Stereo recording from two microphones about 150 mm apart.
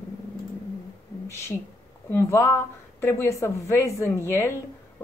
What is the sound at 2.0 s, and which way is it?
Speech, 15° left (ahead or behind).